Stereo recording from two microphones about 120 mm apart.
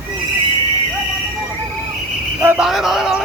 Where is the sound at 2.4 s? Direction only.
15° right (ahead or behind).